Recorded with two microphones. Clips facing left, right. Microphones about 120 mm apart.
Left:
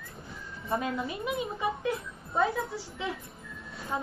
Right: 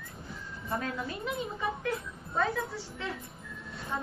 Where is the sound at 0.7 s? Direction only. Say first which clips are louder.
Left 3 dB; 20° left (ahead or behind).